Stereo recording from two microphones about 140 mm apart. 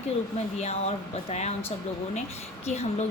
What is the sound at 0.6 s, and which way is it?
Speech, 50° left (ahead or behind).